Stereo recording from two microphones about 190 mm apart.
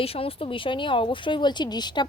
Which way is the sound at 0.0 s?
30° left (ahead or behind).